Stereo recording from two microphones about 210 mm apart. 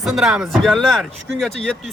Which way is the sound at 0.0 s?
Centre (ahead or behind).